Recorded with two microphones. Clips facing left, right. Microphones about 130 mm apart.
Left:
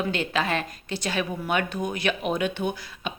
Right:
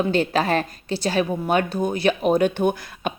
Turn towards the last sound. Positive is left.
turn(degrees=-50)  # may be behind; listen again after turning